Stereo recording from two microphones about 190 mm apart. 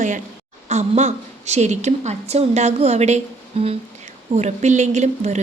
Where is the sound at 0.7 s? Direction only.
35° right (ahead or behind).